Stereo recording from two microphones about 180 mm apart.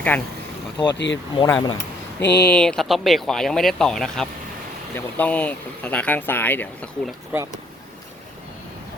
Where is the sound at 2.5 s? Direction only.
5° left (ahead or behind).